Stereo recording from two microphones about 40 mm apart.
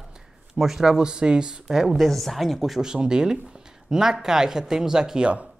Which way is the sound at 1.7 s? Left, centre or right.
Centre.